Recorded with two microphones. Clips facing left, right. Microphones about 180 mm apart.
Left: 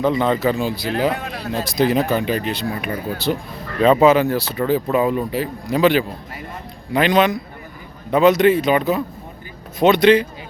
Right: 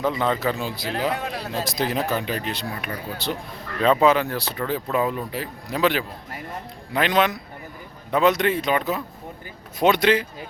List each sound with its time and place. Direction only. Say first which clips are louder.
0.0 s speech: left 5 dB; 5° right (ahead or behind)
9.8 s speech: left 6 dB; 10° right (ahead or behind)